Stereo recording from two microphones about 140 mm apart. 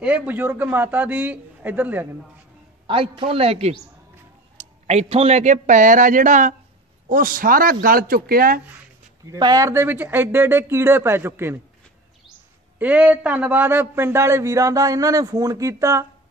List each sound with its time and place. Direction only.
0.0 s a man's voice: 10° right (ahead or behind)
2.9 s a man's voice: 40° right (ahead or behind); by 6.5 s 65° right (ahead or behind)
7.1 s speech: 80° right
9.2 s a man's voice: 25° right (ahead or behind)
12.7 s a man's voice: 10° right (ahead or behind)